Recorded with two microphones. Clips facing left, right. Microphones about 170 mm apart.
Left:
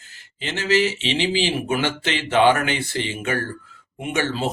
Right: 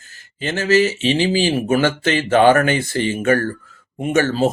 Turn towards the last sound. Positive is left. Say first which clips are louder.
# right 7 dB
turn(degrees=-40)  # may be behind; listen again after turning